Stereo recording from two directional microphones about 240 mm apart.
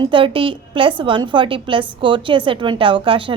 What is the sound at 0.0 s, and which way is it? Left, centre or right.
A woman's voice, right.